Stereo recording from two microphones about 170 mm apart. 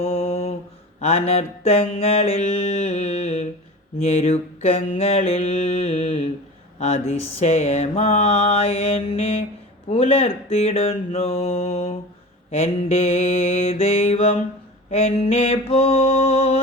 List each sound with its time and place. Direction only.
0.0 s mantra: 35° left (ahead or behind)